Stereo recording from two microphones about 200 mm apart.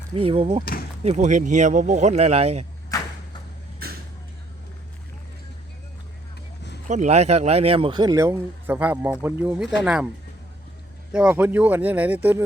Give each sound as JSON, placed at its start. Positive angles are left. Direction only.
{"t": 0.1, "sound": "a man's voice", "side_deg": -25}
{"t": 0.6, "sound": "speech", "side_deg": 45}
{"t": 1.0, "sound": "speech", "side_deg": -35}
{"t": 2.9, "sound": "a sound", "side_deg": 15}
{"t": 6.8, "sound": "a man's voice", "side_deg": -35}
{"t": 11.1, "sound": "speech", "side_deg": -5}